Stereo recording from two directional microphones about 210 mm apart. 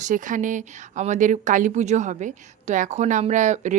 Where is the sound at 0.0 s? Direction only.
40° right (ahead or behind).